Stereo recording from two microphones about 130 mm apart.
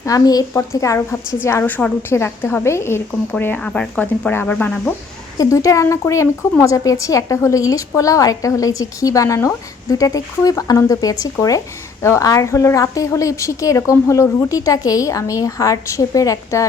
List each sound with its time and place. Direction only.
0.0 s a woman's voice: 30° left (ahead or behind)
5.4 s a woman's voice: 25° left (ahead or behind)